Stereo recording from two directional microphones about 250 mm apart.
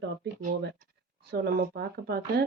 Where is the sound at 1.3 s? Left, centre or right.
Right.